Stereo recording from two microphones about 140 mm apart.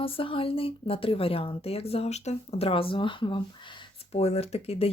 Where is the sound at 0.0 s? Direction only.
40° left (ahead or behind).